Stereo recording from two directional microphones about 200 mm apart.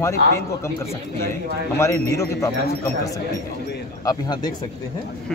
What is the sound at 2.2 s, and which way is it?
Speech, 15° left (ahead or behind).